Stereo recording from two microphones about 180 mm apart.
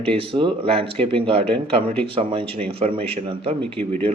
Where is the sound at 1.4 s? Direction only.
5° left (ahead or behind).